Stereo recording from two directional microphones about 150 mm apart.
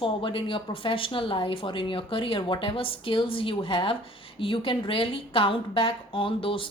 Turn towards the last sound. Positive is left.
turn(degrees=35)  # may be behind; listen again after turning